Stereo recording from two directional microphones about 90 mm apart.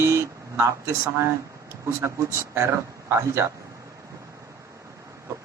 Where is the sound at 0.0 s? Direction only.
30° right (ahead or behind).